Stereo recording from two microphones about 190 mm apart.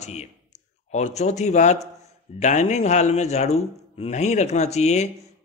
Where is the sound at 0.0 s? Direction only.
35° left (ahead or behind).